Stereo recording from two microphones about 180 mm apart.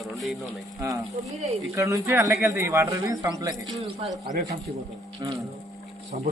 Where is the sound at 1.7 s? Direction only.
15° right (ahead or behind).